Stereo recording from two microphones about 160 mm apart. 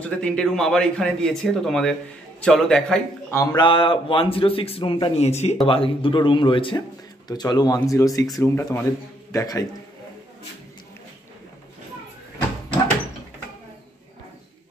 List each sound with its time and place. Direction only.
0.0 s speech: 5° left (ahead or behind)
3.3 s a sound: 15° left (ahead or behind)
3.6 s speech: 35° left (ahead or behind)